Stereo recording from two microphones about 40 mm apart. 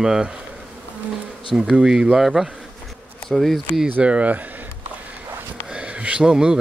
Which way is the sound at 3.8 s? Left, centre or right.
Right.